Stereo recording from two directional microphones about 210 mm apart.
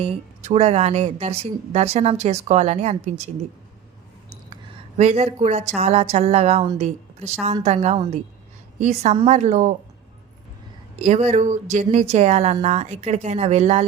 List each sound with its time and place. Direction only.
0.0 s speech: 30° right (ahead or behind)
4.9 s speech: 30° right (ahead or behind)
11.0 s speech: 30° right (ahead or behind)